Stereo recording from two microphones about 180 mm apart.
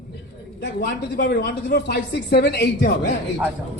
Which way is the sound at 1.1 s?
60° left (ahead or behind).